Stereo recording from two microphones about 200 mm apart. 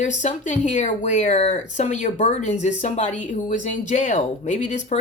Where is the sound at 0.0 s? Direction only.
40° left (ahead or behind).